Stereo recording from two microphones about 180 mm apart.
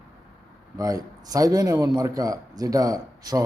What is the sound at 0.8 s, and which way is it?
A man's voice, 20° right (ahead or behind).